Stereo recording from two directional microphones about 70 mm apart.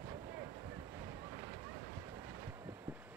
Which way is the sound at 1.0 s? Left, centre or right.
Right.